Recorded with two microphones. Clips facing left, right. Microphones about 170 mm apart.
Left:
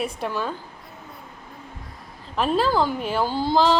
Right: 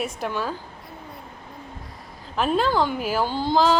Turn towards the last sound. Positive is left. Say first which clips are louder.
# even
turn(degrees=0)  # may be behind; listen again after turning